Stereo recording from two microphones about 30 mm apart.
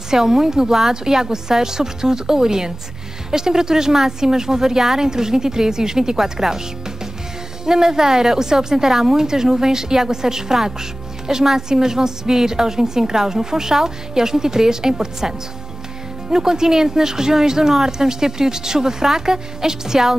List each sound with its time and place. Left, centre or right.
0.1 s a woman's voice: centre
7.6 s a woman's voice: centre